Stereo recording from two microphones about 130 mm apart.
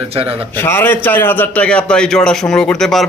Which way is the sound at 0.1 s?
50° right (ahead or behind).